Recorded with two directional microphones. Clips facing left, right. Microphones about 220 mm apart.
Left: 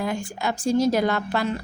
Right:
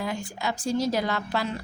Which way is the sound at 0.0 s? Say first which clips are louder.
Left 4 dB; 50° left (ahead or behind).